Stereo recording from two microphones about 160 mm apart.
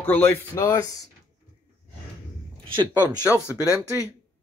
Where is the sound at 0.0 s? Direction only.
15° left (ahead or behind).